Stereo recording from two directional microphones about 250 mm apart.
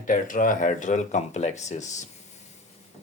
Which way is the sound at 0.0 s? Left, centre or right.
Left.